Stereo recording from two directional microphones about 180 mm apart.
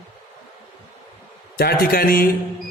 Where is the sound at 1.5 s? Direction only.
60° left (ahead or behind).